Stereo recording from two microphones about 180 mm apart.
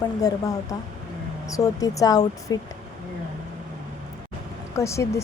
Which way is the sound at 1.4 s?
20° left (ahead or behind).